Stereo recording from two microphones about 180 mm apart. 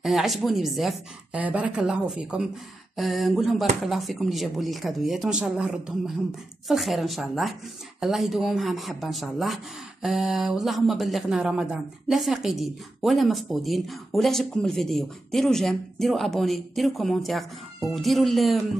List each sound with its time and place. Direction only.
0.0 s speech: centre (ahead or behind)